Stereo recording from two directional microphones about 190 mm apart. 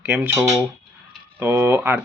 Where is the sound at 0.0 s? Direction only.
10° right (ahead or behind).